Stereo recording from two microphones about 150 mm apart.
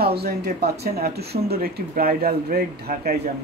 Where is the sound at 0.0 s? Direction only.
90° right.